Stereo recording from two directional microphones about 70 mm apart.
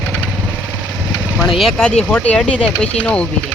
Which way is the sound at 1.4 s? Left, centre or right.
Centre.